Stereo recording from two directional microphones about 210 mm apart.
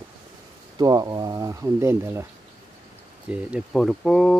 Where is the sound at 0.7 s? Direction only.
20° right (ahead or behind).